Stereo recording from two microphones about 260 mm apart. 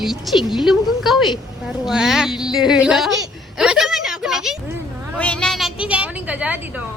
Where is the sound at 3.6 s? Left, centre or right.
Centre.